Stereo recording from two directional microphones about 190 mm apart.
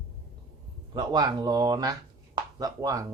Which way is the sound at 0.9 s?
20° right (ahead or behind).